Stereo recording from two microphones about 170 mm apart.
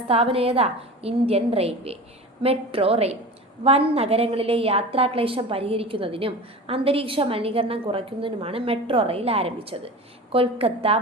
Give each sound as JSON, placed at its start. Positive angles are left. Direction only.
{"t": 0.1, "sound": "a woman's voice", "side_deg": -35}